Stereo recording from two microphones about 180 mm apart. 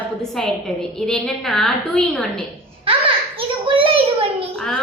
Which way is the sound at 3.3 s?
30° right (ahead or behind).